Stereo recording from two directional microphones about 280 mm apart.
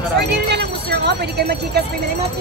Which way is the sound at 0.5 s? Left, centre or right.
Right.